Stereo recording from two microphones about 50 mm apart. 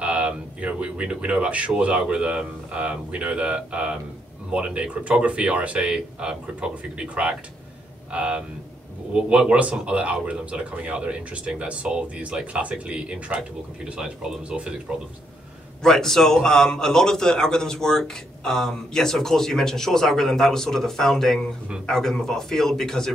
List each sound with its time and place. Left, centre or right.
0.0 s speech: right
15.8 s a man's voice: centre